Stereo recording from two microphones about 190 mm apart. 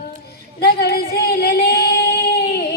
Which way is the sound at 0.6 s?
55° left (ahead or behind).